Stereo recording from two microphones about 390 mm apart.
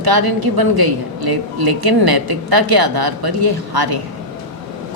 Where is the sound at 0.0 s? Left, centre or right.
Right.